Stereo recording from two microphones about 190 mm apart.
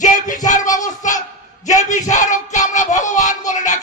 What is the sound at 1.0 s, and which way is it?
A man's voice, 40° left (ahead or behind).